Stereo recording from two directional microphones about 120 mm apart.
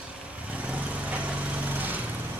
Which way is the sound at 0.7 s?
10° right (ahead or behind).